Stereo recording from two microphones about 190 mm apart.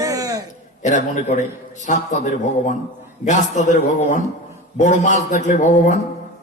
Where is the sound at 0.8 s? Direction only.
40° left (ahead or behind).